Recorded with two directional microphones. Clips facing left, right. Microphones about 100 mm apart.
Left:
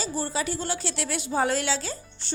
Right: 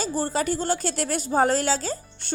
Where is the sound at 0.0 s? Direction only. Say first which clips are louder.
Right 4 dB; 45° right (ahead or behind).